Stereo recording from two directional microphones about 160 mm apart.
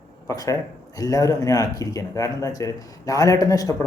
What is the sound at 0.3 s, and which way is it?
Speech, 20° left (ahead or behind).